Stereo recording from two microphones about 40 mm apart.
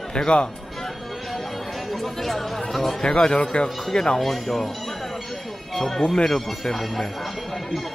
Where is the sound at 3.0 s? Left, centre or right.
Centre.